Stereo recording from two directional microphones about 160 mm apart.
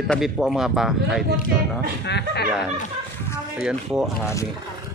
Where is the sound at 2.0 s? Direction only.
90° left.